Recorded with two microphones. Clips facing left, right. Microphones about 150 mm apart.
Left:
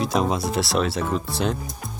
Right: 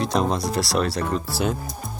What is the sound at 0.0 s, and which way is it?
Speech, centre (ahead or behind).